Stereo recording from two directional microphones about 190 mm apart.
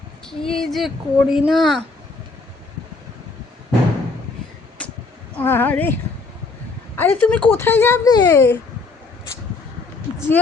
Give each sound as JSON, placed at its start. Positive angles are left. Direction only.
{"t": 0.3, "sound": "speech", "side_deg": 5}
{"t": 4.8, "sound": "a sound", "side_deg": 5}
{"t": 5.4, "sound": "speech", "side_deg": 10}
{"t": 10.2, "sound": "speech", "side_deg": 10}